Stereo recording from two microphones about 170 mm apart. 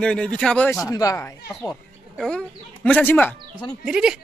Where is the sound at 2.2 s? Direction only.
5° left (ahead or behind).